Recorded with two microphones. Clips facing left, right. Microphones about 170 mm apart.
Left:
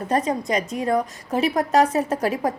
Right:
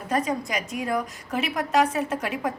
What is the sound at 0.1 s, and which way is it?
A woman's voice, 35° left (ahead or behind).